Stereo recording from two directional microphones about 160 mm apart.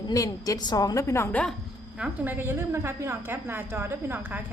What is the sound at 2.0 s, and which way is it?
A woman's voice, 10° right (ahead or behind).